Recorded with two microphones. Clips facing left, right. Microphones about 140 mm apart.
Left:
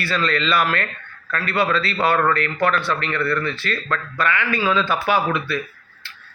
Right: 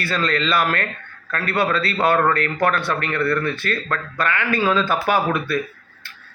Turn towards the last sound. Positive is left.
turn(degrees=-45)  # may be behind; listen again after turning